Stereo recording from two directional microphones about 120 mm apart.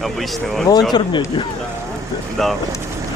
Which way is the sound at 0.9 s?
40° left (ahead or behind).